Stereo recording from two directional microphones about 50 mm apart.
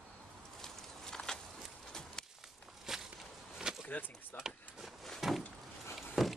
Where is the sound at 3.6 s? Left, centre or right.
Centre.